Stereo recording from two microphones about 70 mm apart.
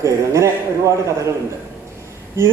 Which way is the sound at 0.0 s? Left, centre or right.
Right.